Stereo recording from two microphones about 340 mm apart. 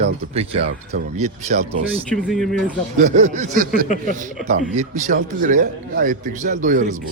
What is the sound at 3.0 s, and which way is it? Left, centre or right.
A man's voice, right.